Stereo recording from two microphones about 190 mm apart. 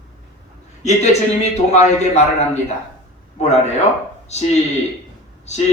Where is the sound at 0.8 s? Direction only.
35° left (ahead or behind).